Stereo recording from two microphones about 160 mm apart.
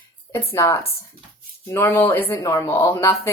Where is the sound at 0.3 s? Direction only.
20° left (ahead or behind).